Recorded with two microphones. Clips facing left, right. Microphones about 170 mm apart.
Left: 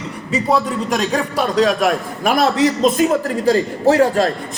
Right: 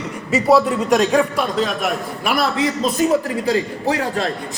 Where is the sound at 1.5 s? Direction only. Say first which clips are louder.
Left 9 dB; 90° left.